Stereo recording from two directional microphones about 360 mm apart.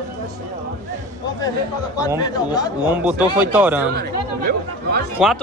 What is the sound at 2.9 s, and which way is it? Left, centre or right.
Speech, centre.